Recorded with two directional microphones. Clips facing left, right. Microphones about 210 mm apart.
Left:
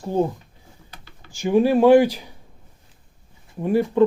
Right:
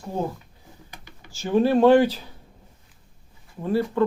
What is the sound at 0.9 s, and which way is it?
Computer keyboard, 15° right (ahead or behind).